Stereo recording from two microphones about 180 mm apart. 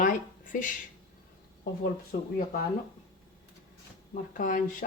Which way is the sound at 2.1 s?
55° left (ahead or behind).